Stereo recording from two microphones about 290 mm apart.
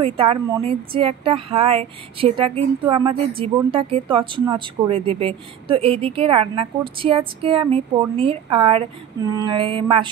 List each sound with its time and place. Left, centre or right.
0.0 s speech: centre